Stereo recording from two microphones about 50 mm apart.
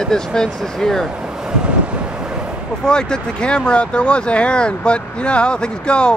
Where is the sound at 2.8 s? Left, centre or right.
Centre.